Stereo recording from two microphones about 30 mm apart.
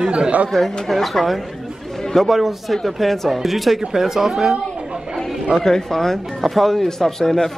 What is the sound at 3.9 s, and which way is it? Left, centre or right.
Speech, centre.